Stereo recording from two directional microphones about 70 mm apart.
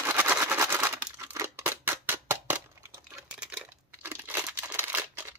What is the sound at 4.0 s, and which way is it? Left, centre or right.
Crumpling, right.